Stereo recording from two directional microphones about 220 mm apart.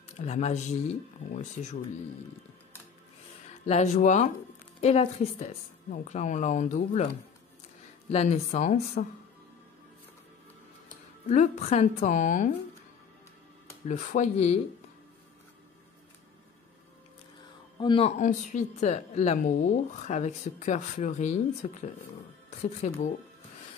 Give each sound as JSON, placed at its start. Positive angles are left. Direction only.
{"t": 0.2, "sound": "speech", "side_deg": 30}
{"t": 3.6, "sound": "speech", "side_deg": 30}
{"t": 8.1, "sound": "speech", "side_deg": 30}
{"t": 11.2, "sound": "speech", "side_deg": 30}
{"t": 13.8, "sound": "speech", "side_deg": 35}
{"t": 17.7, "sound": "speech", "side_deg": 25}